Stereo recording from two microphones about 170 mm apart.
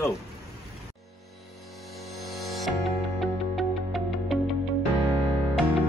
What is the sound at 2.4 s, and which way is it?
Music, centre (ahead or behind).